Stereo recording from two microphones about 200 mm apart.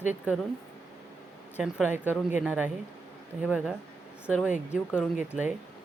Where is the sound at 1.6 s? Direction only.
5° right (ahead or behind).